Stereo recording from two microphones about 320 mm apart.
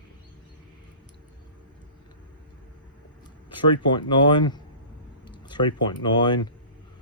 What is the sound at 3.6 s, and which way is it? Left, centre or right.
Speech, centre.